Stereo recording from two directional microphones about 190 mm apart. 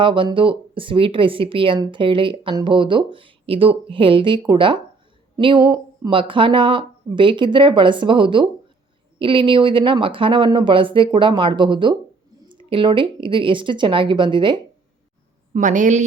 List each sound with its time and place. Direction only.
0.0 s speech: 25° right (ahead or behind)
15.5 s a woman's voice: 40° right (ahead or behind)